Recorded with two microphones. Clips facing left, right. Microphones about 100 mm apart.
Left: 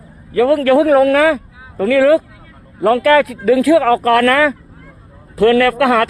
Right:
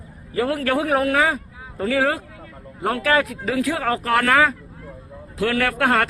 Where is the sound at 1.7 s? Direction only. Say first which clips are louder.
Left 10 dB; 80° left.